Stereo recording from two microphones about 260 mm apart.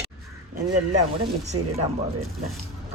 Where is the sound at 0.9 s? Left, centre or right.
Right.